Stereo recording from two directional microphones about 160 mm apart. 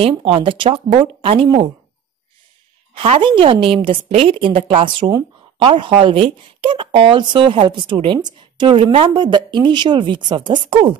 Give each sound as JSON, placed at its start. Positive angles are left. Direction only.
{"t": 0.0, "sound": "speech", "side_deg": -35}
{"t": 2.9, "sound": "speech", "side_deg": -35}